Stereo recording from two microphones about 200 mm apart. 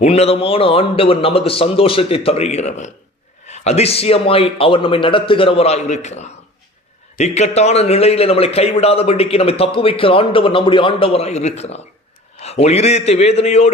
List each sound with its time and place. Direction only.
0.0 s a man's voice: 30° left (ahead or behind)